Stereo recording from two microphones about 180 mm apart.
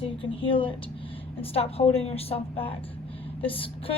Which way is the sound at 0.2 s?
30° left (ahead or behind).